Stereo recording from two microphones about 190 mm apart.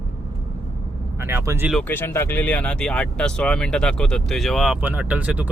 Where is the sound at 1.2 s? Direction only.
15° right (ahead or behind).